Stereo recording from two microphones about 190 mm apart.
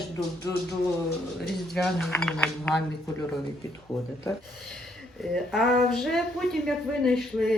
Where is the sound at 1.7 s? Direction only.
5° left (ahead or behind).